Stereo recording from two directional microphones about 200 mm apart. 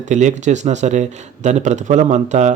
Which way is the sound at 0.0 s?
35° right (ahead or behind).